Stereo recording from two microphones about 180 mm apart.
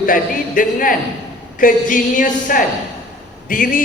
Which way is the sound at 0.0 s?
50° left (ahead or behind).